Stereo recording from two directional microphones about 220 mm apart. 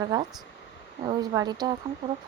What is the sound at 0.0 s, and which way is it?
A woman's voice, 15° right (ahead or behind).